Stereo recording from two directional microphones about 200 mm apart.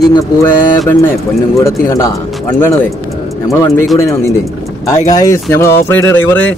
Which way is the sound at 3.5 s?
15° left (ahead or behind).